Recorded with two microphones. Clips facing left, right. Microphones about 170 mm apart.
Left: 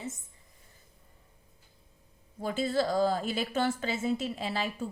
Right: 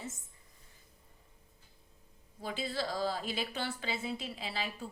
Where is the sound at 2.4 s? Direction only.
45° left (ahead or behind).